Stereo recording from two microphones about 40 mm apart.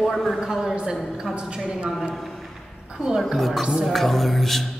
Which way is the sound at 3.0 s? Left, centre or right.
Centre.